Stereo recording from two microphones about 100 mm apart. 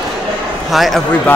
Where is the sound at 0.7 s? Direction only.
Centre (ahead or behind).